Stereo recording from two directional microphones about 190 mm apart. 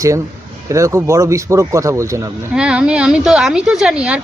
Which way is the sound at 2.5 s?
5° right (ahead or behind).